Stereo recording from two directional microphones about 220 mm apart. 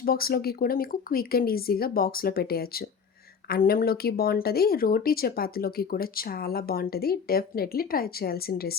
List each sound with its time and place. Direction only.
0.0 s speech: 45° left (ahead or behind)